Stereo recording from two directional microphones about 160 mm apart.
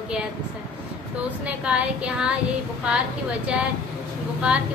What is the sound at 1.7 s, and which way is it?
Speech, 5° right (ahead or behind).